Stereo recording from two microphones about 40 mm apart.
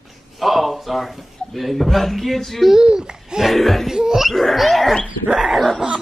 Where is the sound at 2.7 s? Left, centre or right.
Right.